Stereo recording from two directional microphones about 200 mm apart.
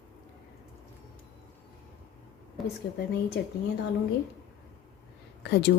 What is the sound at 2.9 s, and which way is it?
Speech, 55° left (ahead or behind).